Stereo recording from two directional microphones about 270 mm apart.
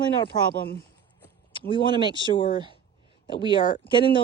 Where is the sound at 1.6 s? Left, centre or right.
Centre.